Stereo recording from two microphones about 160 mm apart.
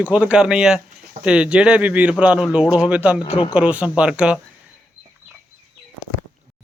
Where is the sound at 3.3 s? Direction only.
35° left (ahead or behind).